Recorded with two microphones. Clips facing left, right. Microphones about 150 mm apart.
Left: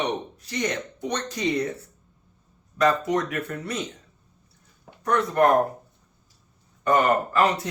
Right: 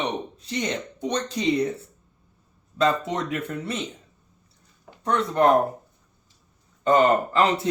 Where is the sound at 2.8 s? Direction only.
25° right (ahead or behind).